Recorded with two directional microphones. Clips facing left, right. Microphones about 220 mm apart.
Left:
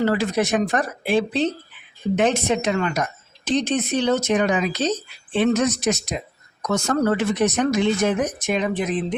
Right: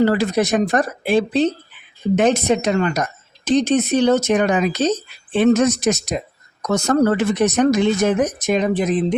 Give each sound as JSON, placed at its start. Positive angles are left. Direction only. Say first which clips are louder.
{"t": 0.0, "sound": "speech", "louder": "right 4 dB", "side_deg": -40}